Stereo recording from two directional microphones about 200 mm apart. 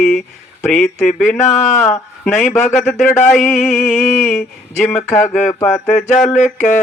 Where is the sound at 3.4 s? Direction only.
10° left (ahead or behind).